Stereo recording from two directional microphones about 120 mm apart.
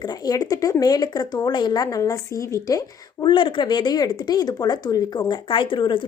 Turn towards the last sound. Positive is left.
turn(degrees=45)  # may be behind; listen again after turning